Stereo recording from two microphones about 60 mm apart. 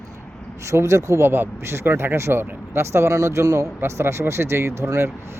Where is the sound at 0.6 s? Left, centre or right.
Right.